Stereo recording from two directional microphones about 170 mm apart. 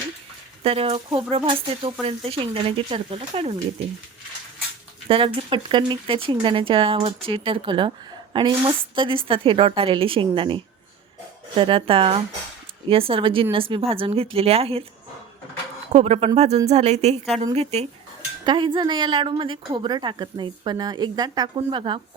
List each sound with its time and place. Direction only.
0.6 s speech: 35° right (ahead or behind)
5.0 s speech: 30° right (ahead or behind)
15.9 s a woman's voice: 40° right (ahead or behind)